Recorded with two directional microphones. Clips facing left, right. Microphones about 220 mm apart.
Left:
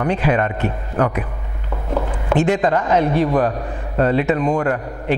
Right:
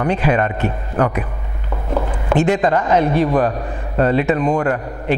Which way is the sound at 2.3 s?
10° right (ahead or behind).